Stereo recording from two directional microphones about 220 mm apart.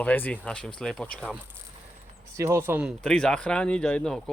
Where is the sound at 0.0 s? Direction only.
5° left (ahead or behind).